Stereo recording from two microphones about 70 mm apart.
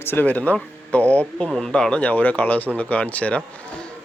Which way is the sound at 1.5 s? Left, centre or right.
Centre.